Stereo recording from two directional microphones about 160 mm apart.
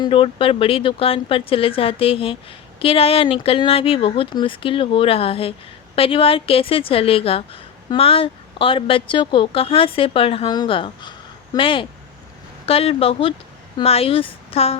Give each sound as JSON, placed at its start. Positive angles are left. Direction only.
{"t": 0.0, "sound": "speech", "side_deg": 35}